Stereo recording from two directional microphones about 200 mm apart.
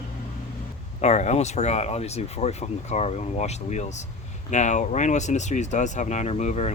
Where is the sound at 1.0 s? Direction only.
35° left (ahead or behind).